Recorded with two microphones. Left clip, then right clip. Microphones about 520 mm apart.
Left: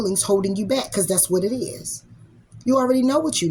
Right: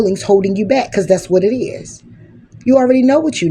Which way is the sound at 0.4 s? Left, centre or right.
Left.